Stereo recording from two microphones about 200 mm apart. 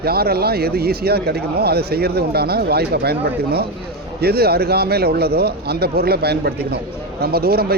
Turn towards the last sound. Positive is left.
turn(degrees=-50)  # may be behind; listen again after turning